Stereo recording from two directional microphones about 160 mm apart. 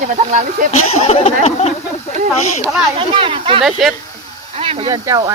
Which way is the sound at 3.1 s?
30° right (ahead or behind).